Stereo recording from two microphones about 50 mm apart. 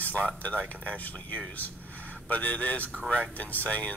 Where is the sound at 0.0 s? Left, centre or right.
Left.